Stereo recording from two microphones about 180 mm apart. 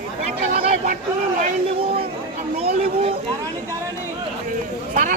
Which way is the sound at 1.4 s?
30° right (ahead or behind).